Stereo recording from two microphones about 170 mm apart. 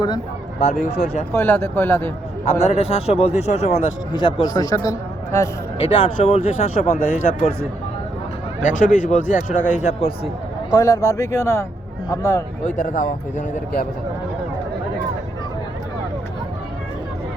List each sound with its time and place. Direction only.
0.6 s speech: 40° left (ahead or behind)
1.3 s speech: 15° left (ahead or behind)
2.5 s speech: 35° left (ahead or behind)
4.1 s a man's voice: 30° left (ahead or behind)
5.8 s speech: 35° left (ahead or behind)
8.6 s speech: 50° left (ahead or behind)
10.8 s a man's voice: 20° left (ahead or behind)
12.6 s speech: 50° left (ahead or behind)